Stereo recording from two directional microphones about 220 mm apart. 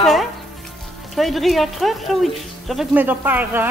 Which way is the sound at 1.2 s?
Centre (ahead or behind).